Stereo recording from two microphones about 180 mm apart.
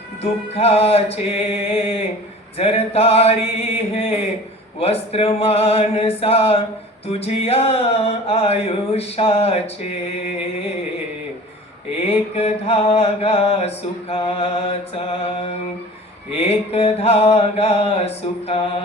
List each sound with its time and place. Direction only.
0.2 s mantra: 35° left (ahead or behind)
12.0 s mantra: 35° left (ahead or behind)